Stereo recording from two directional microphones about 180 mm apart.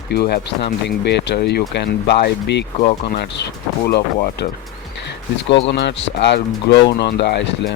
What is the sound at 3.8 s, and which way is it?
Speech, 65° left (ahead or behind).